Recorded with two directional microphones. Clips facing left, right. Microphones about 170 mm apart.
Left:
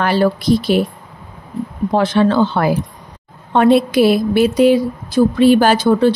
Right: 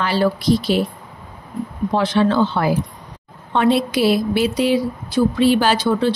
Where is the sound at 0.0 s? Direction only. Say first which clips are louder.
Left 3 dB; 50° left (ahead or behind).